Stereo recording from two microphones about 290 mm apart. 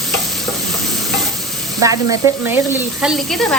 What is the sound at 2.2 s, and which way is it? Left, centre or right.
Speech, centre.